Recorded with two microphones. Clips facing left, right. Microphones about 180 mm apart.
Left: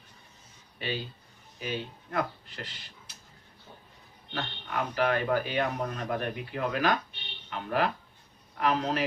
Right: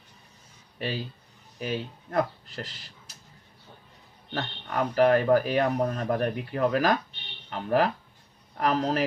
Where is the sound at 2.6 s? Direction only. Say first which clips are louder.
Right 5 dB; 40° right (ahead or behind).